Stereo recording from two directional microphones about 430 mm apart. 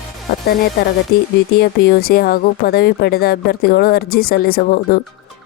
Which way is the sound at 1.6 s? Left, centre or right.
Left.